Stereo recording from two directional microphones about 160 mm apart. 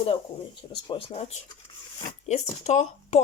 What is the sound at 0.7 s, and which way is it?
Speech, 30° left (ahead or behind).